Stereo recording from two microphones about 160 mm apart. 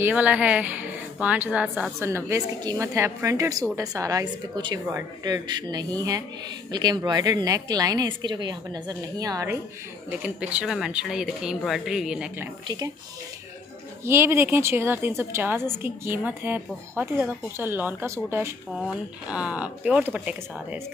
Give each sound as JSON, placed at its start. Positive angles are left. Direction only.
{"t": 0.0, "sound": "a woman's voice", "side_deg": -10}
{"t": 10.2, "sound": "speech", "side_deg": -5}
{"t": 12.6, "sound": "a woman's voice", "side_deg": -25}
{"t": 14.0, "sound": "a woman's voice", "side_deg": -15}
{"t": 18.8, "sound": "a woman's voice", "side_deg": -5}